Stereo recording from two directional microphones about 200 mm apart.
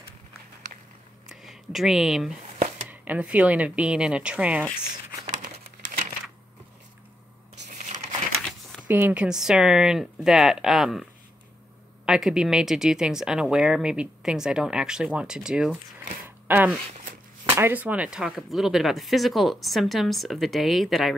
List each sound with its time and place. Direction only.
1.3 s speech: centre (ahead or behind)
5.4 s crumpling: 45° right (ahead or behind)
8.8 s speech: 10° right (ahead or behind)
12.1 s speech: 5° right (ahead or behind)